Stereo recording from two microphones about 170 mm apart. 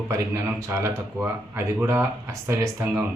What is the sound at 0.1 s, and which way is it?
Speech, 15° right (ahead or behind).